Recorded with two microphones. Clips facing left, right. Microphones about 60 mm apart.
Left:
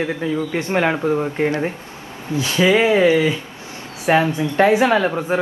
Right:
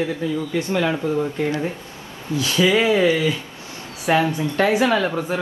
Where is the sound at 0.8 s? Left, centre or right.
Left.